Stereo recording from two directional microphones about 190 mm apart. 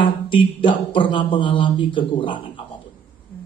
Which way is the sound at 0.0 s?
25° left (ahead or behind).